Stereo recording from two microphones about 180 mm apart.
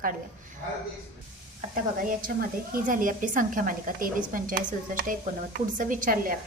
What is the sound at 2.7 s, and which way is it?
A woman's voice, 50° right (ahead or behind).